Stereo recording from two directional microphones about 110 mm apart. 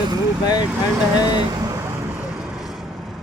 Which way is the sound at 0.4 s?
40° left (ahead or behind).